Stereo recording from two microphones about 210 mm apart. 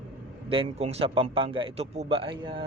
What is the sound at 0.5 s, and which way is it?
A man's voice, 25° right (ahead or behind).